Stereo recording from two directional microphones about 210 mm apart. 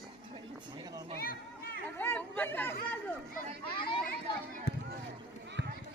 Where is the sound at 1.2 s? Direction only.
45° left (ahead or behind).